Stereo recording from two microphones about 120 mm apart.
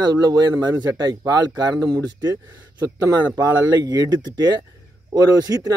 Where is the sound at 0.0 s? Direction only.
35° right (ahead or behind).